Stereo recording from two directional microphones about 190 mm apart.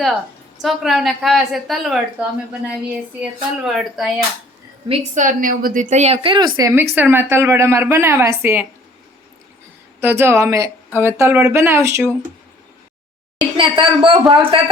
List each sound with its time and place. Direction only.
0.6 s a woman's voice: centre (ahead or behind)
4.9 s a woman's voice: 40° right (ahead or behind); by 8.6 s 10° right (ahead or behind)
10.0 s speech: 10° right (ahead or behind)
13.6 s a man's voice: 25° right (ahead or behind)